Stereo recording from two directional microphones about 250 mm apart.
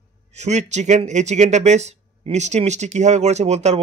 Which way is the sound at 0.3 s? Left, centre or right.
Right.